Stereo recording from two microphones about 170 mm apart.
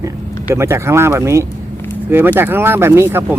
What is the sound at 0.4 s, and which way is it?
Speech, 15° right (ahead or behind).